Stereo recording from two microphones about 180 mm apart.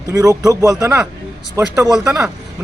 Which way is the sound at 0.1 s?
20° right (ahead or behind).